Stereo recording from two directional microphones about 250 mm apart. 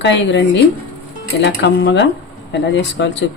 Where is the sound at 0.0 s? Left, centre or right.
Left.